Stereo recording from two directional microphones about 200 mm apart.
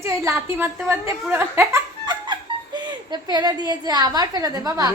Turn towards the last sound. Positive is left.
turn(degrees=-20)  # may be behind; listen again after turning